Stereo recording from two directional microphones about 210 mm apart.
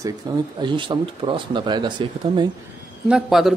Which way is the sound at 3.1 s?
5° right (ahead or behind).